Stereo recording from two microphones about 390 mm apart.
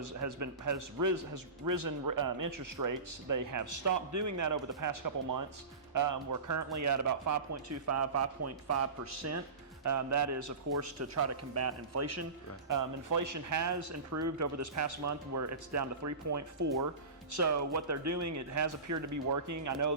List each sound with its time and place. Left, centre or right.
0.0 s a man's voice: right
12.6 s a man's voice: right